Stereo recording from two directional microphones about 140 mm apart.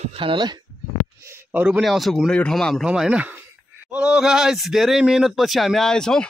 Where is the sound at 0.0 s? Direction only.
40° right (ahead or behind).